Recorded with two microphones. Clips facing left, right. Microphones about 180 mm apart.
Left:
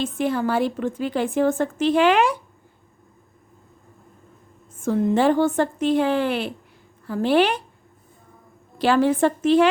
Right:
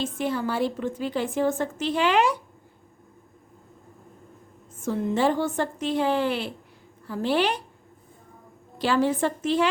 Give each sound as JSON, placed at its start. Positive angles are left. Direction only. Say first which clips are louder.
{"t": 0.0, "sound": "a woman's voice", "louder": "left 4 dB", "side_deg": 55}
{"t": 4.9, "sound": "a woman's voice", "louder": "left 5 dB", "side_deg": 55}
{"t": 8.8, "sound": "a woman's voice", "louder": "left 5 dB", "side_deg": 60}